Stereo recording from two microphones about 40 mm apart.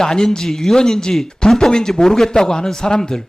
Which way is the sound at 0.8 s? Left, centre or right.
Centre.